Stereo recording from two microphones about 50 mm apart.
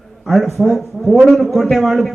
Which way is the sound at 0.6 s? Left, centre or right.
Centre.